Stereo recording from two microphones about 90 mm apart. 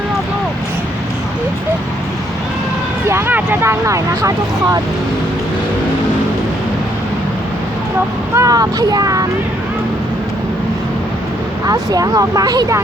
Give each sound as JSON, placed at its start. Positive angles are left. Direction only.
{"t": 3.1, "sound": "speech", "side_deg": -25}
{"t": 8.4, "sound": "speech", "side_deg": -40}
{"t": 11.6, "sound": "speech", "side_deg": -40}